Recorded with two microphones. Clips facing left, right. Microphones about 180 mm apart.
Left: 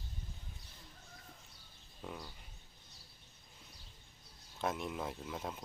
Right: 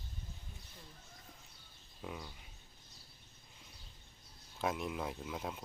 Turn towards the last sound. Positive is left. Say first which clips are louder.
# right 1 dB
turn(degrees=0)  # may be behind; listen again after turning